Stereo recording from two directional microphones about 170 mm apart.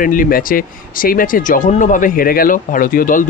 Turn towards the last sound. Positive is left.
turn(degrees=55)  # may be behind; listen again after turning